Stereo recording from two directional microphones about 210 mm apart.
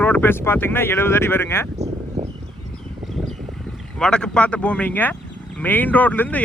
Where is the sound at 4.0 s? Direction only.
5° left (ahead or behind).